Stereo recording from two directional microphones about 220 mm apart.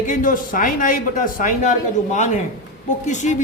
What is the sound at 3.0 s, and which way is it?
Speech, 35° left (ahead or behind).